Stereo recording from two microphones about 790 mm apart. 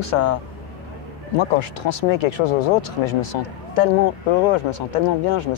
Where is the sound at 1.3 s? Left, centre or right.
Left.